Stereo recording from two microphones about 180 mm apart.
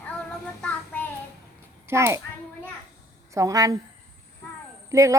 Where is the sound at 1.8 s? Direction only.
15° right (ahead or behind).